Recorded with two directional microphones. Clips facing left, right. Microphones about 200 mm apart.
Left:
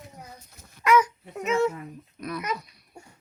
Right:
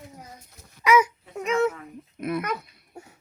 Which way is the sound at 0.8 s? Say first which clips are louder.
Right 1 dB; 5° right (ahead or behind).